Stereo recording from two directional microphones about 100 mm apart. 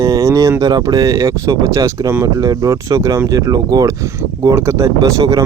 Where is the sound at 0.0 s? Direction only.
35° right (ahead or behind).